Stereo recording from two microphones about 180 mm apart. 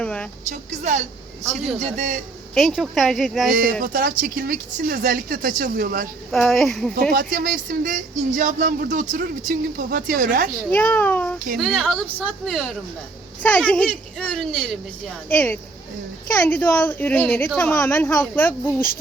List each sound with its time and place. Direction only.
0.0 s a woman's voice: 5° left (ahead or behind)
0.5 s speech: 40° right (ahead or behind)
2.6 s speech: centre (ahead or behind)
3.5 s speech: 50° right (ahead or behind)
6.3 s speech: centre (ahead or behind)
7.1 s speech: 50° right (ahead or behind)
10.7 s a woman's voice: 10° left (ahead or behind)